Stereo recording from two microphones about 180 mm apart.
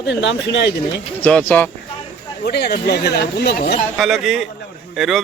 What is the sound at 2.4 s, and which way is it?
Speech, 65° left (ahead or behind).